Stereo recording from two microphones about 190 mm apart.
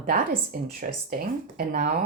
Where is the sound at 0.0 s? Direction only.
50° right (ahead or behind).